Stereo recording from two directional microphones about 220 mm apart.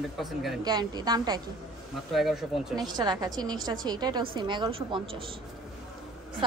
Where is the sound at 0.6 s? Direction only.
20° right (ahead or behind).